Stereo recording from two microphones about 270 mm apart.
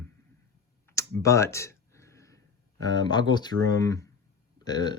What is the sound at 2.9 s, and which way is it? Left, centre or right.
Speech, centre.